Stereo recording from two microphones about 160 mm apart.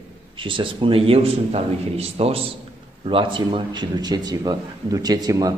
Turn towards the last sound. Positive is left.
turn(degrees=-25)  # may be behind; listen again after turning